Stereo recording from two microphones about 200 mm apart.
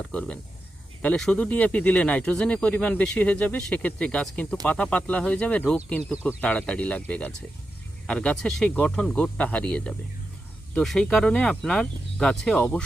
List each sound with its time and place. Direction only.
0.1 s speech: 5° left (ahead or behind)